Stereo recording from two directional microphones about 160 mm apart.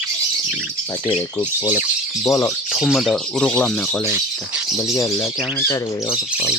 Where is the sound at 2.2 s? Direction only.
20° left (ahead or behind).